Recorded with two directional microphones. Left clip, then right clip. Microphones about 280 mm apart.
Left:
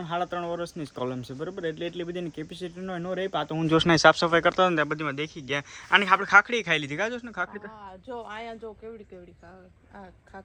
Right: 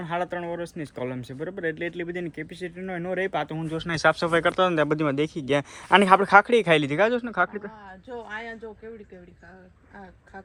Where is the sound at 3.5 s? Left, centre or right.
Left.